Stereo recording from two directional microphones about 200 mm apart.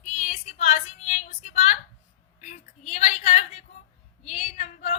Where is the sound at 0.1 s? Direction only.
35° left (ahead or behind).